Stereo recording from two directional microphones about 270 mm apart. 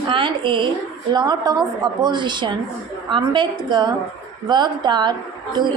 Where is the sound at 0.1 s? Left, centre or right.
Centre.